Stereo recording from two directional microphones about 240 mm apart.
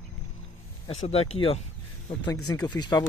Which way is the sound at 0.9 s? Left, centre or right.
Left.